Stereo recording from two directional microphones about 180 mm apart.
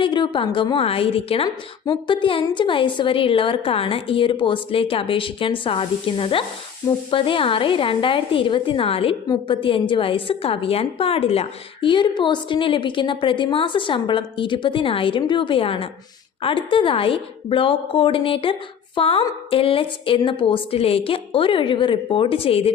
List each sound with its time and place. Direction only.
0.0 s a woman's voice: 25° left (ahead or behind)